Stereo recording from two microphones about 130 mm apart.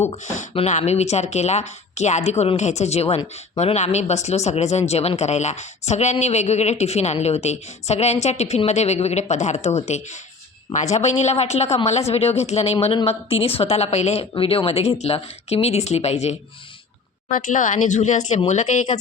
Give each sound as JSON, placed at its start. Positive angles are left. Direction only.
{"t": 0.0, "sound": "a woman's voice", "side_deg": 55}
{"t": 17.2, "sound": "speech", "side_deg": 85}